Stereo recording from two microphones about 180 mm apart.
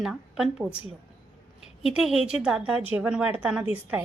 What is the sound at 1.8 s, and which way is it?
A woman's voice, centre (ahead or behind).